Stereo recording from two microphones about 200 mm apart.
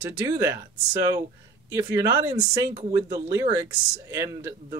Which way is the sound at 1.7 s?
15° right (ahead or behind).